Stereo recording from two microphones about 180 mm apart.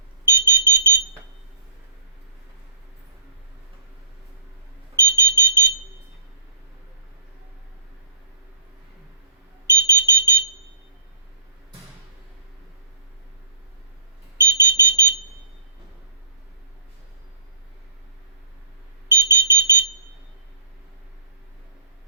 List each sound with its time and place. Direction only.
0.3 s smoke detector: 15° right (ahead or behind)
4.9 s smoke detector: 15° right (ahead or behind)
9.6 s smoke detector: 15° right (ahead or behind)
14.3 s smoke detector: 15° right (ahead or behind)
19.0 s smoke detector: 15° right (ahead or behind)